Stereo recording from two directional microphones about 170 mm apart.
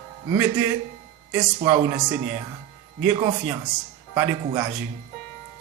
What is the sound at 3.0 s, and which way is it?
A man's voice, 15° right (ahead or behind).